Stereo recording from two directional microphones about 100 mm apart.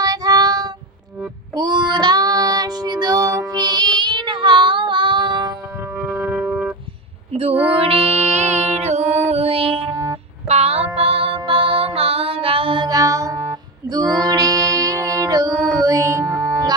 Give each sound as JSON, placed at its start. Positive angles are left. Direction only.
{"t": 0.0, "sound": "child singing", "side_deg": -40}
{"t": 6.0, "sound": "music", "side_deg": -5}
{"t": 7.7, "sound": "music", "side_deg": -70}
{"t": 9.9, "sound": "music", "side_deg": -35}
{"t": 10.5, "sound": "child singing", "side_deg": -90}
{"t": 10.9, "sound": "music", "side_deg": -70}